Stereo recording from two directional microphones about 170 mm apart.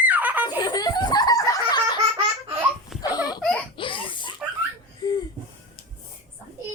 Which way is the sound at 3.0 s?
20° left (ahead or behind).